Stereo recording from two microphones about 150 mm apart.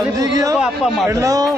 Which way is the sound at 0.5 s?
5° right (ahead or behind).